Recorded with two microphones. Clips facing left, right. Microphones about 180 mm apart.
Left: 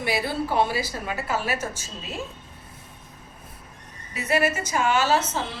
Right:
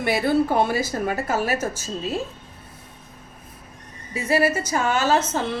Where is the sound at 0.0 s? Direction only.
50° right (ahead or behind).